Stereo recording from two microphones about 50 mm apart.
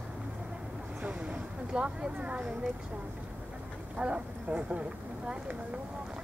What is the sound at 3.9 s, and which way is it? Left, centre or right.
Speech, right.